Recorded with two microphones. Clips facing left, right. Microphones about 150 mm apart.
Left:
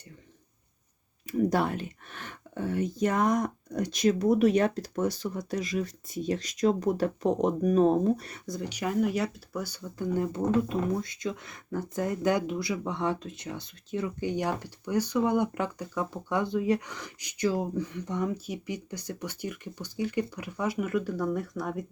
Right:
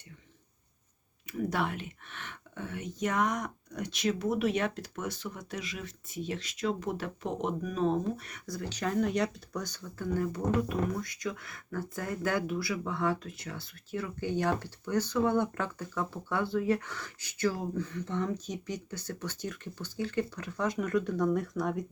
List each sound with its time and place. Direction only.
1.3 s speech: 40° left (ahead or behind)
8.4 s speech: 20° left (ahead or behind); by 21.8 s centre (ahead or behind)